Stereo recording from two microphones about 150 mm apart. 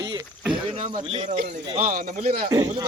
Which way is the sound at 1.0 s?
40° right (ahead or behind).